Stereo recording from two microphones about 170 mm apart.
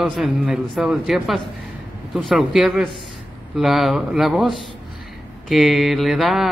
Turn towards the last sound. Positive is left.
turn(degrees=0)  # may be behind; listen again after turning